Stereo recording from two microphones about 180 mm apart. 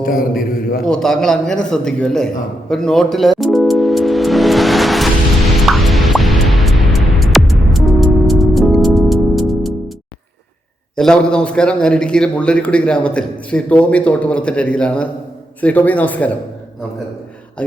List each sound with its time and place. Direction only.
0.0 s a man's voice: 50° left (ahead or behind)
0.9 s a sound: centre (ahead or behind)
5.5 s music: centre (ahead or behind)
10.9 s a man's voice: 5° left (ahead or behind)